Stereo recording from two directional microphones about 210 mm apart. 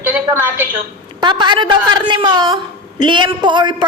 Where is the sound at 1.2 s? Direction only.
20° right (ahead or behind).